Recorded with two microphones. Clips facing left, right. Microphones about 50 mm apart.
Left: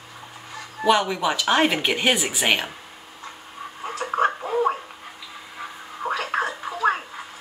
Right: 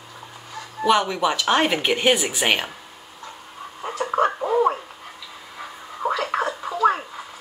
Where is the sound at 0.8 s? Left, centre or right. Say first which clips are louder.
Right 1 dB; centre.